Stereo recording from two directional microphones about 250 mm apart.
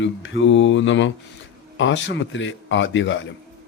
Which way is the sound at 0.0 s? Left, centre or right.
Left.